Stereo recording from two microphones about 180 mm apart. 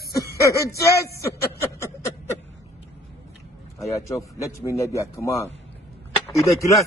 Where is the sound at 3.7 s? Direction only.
15° left (ahead or behind).